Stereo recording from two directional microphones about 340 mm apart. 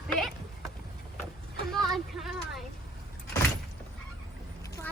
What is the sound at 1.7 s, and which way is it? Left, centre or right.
Speech, centre.